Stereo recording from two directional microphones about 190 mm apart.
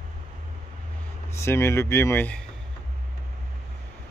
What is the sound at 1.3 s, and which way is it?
Speech, 15° left (ahead or behind).